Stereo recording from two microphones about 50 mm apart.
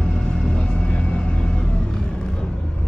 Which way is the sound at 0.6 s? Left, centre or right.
Centre.